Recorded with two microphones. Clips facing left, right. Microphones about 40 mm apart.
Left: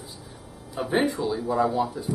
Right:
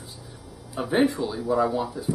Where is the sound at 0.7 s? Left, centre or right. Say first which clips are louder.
Right 2 dB; centre.